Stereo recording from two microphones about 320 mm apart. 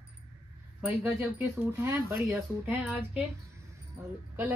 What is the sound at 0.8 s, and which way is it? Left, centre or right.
A woman's voice, centre.